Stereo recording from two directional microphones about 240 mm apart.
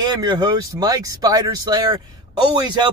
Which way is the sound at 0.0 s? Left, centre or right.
Centre.